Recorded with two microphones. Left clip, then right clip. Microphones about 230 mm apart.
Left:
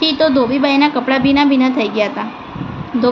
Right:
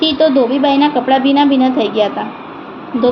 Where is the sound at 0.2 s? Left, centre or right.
Left.